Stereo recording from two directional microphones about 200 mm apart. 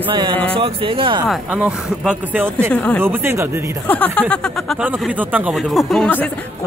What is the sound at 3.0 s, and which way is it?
Speech, 10° right (ahead or behind).